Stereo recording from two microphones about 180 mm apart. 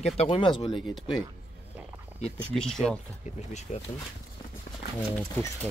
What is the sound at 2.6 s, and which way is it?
Speech, 5° left (ahead or behind).